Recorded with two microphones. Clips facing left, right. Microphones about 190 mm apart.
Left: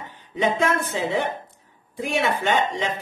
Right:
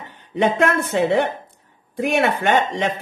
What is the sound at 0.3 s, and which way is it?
Speech, 65° right (ahead or behind).